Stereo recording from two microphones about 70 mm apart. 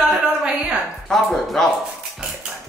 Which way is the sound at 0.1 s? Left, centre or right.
Centre.